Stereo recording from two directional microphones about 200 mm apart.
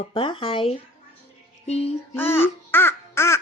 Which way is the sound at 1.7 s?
30° left (ahead or behind).